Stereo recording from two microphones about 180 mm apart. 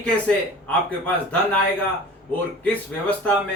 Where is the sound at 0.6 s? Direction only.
5° left (ahead or behind).